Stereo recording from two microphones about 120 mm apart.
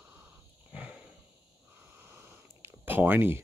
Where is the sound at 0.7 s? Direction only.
10° right (ahead or behind).